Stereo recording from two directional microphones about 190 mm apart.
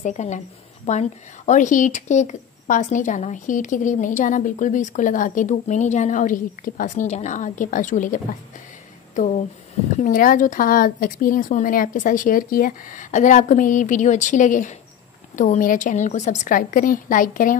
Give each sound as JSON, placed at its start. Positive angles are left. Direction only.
{"t": 0.0, "sound": "speech", "side_deg": 40}
{"t": 9.9, "sound": "speech", "side_deg": 45}